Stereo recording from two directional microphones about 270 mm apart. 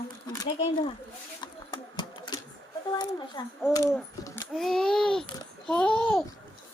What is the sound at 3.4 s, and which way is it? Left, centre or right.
Speech, centre.